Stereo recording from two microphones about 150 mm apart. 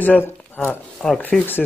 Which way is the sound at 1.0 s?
10° left (ahead or behind).